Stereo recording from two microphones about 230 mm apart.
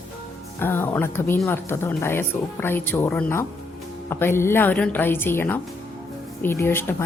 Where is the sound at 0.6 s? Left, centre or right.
Centre.